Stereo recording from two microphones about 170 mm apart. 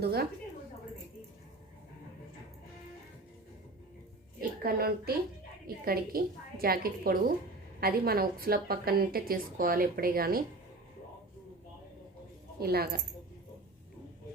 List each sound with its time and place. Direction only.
0.0 s a woman's voice: 65° right (ahead or behind)
4.4 s a woman's voice: 65° right (ahead or behind)
12.5 s speech: 65° right (ahead or behind)